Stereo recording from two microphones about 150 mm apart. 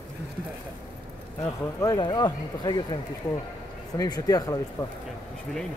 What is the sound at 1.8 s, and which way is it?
Speech, 30° left (ahead or behind).